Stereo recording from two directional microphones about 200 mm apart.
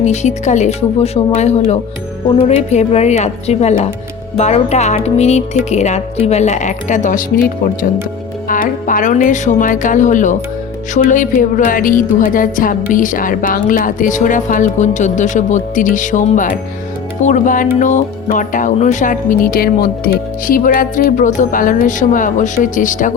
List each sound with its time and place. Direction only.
0.0 s speech: 35° left (ahead or behind)